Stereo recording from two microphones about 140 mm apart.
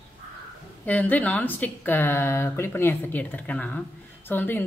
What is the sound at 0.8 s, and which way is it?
Speech, 10° left (ahead or behind).